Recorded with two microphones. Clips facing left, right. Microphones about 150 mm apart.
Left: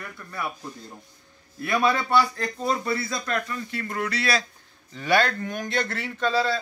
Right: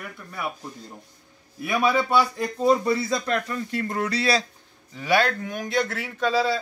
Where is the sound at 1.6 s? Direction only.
10° right (ahead or behind).